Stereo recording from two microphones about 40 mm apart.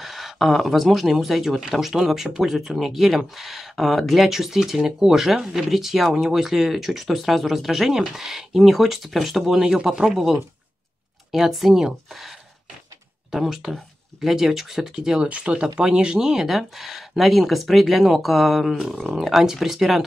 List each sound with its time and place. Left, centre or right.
0.0 s speech: centre
13.3 s speech: centre
15.0 s speech: centre
15.2 s speech: right
15.5 s speech: right